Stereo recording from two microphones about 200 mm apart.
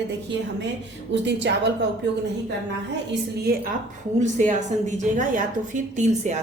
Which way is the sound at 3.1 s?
50° right (ahead or behind).